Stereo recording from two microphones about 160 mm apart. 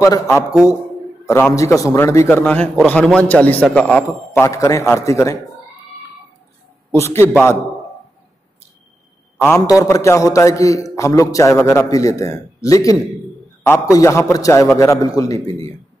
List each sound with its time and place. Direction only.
0.0 s a man's voice: 20° left (ahead or behind)
6.9 s a man's voice: 15° left (ahead or behind)
9.4 s a man's voice: 20° left (ahead or behind)
13.9 s a man's voice: 20° left (ahead or behind)